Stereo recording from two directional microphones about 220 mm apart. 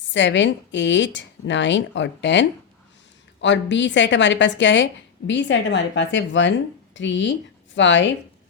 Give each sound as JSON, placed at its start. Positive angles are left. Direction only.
{"t": 0.1, "sound": "a woman's voice", "side_deg": 55}